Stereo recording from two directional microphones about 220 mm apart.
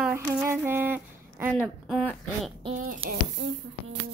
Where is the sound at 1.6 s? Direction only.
5° left (ahead or behind).